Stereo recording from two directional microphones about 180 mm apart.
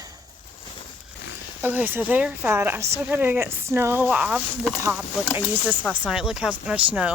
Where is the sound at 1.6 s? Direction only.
10° right (ahead or behind).